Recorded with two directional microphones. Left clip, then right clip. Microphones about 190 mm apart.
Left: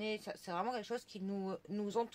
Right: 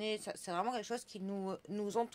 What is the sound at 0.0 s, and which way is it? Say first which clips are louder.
Speech: right 2 dB; 35° right (ahead or behind).